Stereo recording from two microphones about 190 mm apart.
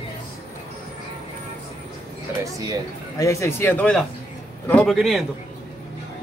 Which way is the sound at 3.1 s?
15° left (ahead or behind).